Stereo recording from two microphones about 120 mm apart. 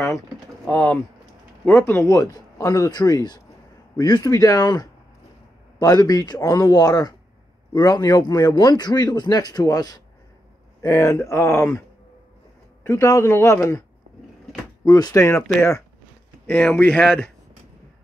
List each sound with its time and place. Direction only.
0.7 s a man's voice: 10° left (ahead or behind)
12.8 s speech: 25° left (ahead or behind)
14.9 s a man's voice: 30° left (ahead or behind)
16.4 s speech: 15° left (ahead or behind)